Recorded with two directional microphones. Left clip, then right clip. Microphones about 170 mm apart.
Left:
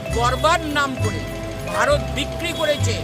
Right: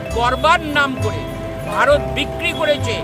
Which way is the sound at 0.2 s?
5° right (ahead or behind).